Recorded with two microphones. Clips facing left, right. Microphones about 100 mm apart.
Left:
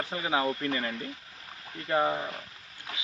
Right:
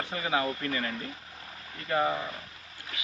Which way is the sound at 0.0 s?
25° left (ahead or behind).